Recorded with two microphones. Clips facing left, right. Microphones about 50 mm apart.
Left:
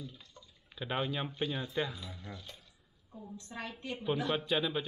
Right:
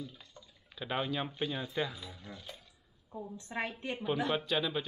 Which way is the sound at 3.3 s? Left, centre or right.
Right.